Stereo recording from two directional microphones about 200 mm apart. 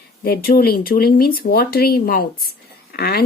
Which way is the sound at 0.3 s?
50° left (ahead or behind).